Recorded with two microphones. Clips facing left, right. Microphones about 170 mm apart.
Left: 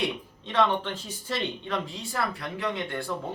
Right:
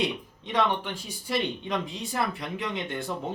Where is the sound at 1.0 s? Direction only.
15° right (ahead or behind).